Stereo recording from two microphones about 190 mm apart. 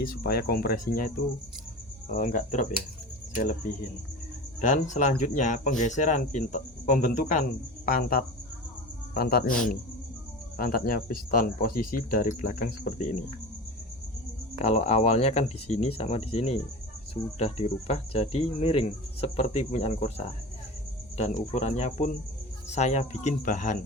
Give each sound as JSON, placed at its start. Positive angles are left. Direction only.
{"t": 0.2, "sound": "speech", "side_deg": 55}
{"t": 10.6, "sound": "speech", "side_deg": 50}
{"t": 14.6, "sound": "speech", "side_deg": 35}